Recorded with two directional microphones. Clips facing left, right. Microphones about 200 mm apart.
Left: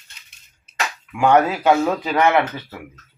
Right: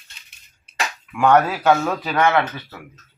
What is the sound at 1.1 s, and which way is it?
Speech, 10° left (ahead or behind).